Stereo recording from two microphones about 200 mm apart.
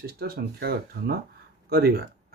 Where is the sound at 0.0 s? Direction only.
50° right (ahead or behind).